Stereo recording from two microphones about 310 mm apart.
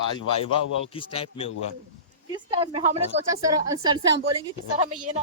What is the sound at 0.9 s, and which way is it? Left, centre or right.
Speech, centre.